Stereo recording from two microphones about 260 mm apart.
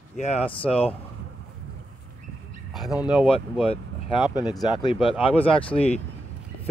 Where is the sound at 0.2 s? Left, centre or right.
Left.